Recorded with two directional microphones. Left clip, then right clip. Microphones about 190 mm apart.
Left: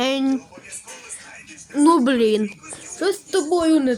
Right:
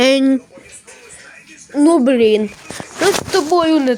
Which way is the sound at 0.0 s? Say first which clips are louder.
Right 9 dB; 25° right (ahead or behind).